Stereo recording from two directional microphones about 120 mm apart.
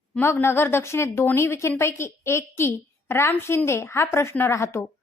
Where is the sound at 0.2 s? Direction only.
20° left (ahead or behind).